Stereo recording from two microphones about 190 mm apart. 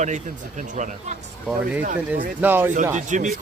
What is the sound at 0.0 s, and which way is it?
Speech, 40° right (ahead or behind).